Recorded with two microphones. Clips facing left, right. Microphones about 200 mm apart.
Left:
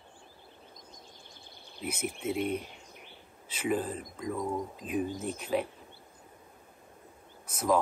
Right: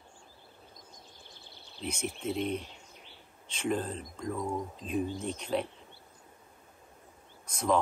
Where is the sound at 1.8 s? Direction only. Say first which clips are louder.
Left 1 dB; 5° left (ahead or behind).